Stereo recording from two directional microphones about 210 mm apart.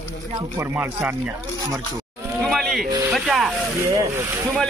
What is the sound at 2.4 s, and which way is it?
A man's voice, centre (ahead or behind).